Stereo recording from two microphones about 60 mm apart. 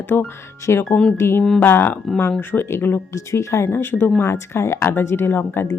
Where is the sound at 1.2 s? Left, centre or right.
Left.